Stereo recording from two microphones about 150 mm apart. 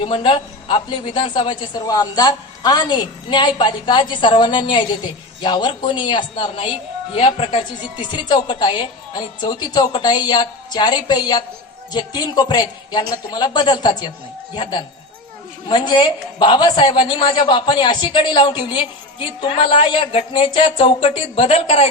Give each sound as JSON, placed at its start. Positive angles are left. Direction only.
{"t": 0.0, "sound": "a man's voice", "side_deg": 35}